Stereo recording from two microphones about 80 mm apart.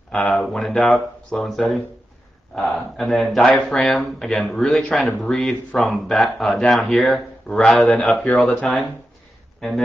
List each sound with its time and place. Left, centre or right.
0.1 s speech: centre
4.6 s speech: centre
8.4 s speech: centre
9.6 s speech: centre